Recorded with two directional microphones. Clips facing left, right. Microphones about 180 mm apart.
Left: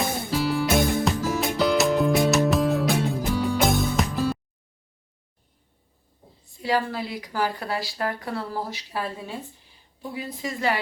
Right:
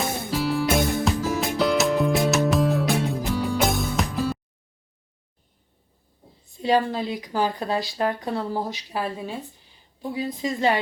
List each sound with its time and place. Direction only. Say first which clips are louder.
0.3 s music: even; centre (ahead or behind)
6.6 s a woman's voice: right 4 dB; 20° right (ahead or behind)